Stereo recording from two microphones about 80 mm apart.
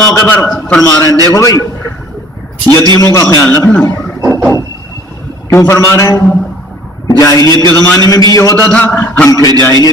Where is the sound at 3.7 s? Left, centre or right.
Left.